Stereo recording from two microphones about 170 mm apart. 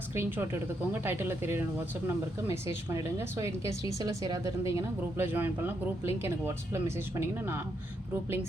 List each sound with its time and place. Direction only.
0.2 s speech: 10° right (ahead or behind)